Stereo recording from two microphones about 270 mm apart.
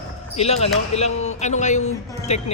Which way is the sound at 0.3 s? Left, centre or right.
Left.